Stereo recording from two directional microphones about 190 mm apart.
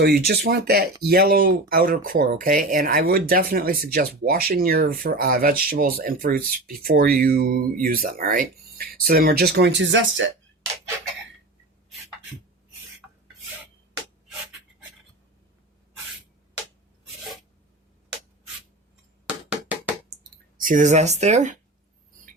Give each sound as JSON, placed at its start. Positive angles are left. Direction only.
{"t": 0.0, "sound": "speech", "side_deg": -60}
{"t": 19.3, "sound": "a sound", "side_deg": -5}
{"t": 20.6, "sound": "speech", "side_deg": -45}